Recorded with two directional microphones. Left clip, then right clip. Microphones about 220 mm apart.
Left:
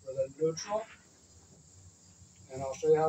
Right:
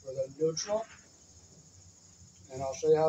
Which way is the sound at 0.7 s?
5° left (ahead or behind).